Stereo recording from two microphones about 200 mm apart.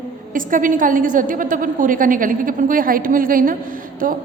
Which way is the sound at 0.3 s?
40° right (ahead or behind).